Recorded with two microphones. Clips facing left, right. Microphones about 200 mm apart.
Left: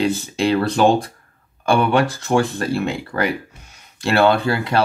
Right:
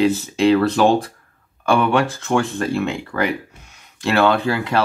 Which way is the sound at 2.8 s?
Centre (ahead or behind).